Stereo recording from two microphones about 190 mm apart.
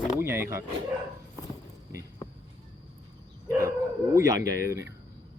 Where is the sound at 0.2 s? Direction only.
15° right (ahead or behind).